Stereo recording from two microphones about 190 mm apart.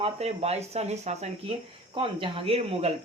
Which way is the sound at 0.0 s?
35° right (ahead or behind).